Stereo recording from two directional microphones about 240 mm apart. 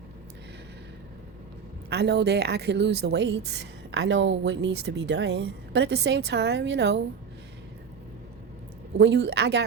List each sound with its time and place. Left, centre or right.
1.9 s a woman's voice: right
9.0 s a woman's voice: right